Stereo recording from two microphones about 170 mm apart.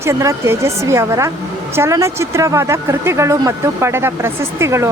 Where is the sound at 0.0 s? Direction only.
20° right (ahead or behind).